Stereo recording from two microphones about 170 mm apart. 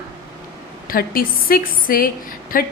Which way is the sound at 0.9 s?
60° left (ahead or behind).